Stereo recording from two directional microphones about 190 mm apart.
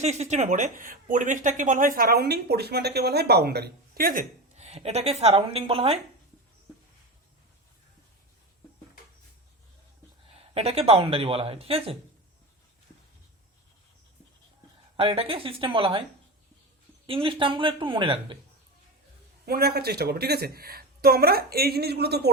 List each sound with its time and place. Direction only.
0.0 s speech: 35° right (ahead or behind)
10.2 s speech: 30° right (ahead or behind)
14.9 s speech: 30° right (ahead or behind)
17.1 s speech: 30° right (ahead or behind)
19.5 s speech: 55° right (ahead or behind)